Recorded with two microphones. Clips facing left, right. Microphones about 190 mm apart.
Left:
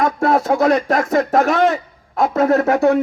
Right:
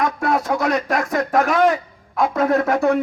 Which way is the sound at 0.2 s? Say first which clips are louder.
Left 5 dB; 25° left (ahead or behind).